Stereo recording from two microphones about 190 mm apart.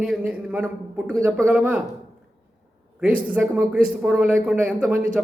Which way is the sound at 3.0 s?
10° right (ahead or behind).